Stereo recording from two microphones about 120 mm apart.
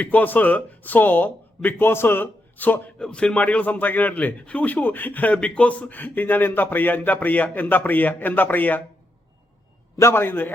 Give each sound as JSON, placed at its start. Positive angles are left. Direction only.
{"t": 0.0, "sound": "speech", "side_deg": 15}
{"t": 10.0, "sound": "a man's voice", "side_deg": 20}